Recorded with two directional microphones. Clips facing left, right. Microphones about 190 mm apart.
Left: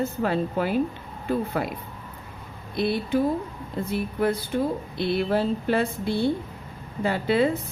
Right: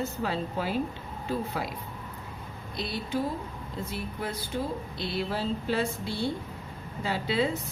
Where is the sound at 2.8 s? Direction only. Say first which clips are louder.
Left 8 dB; 55° left (ahead or behind).